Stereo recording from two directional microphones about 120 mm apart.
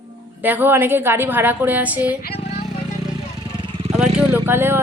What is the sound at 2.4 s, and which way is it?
Vehicle, 60° left (ahead or behind).